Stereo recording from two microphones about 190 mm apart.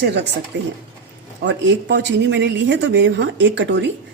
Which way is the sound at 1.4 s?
70° right (ahead or behind).